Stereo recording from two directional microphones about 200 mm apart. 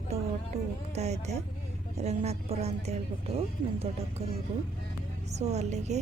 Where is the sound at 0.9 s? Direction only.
35° right (ahead or behind).